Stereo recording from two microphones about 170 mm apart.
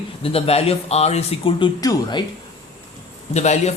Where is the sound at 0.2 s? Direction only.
35° left (ahead or behind).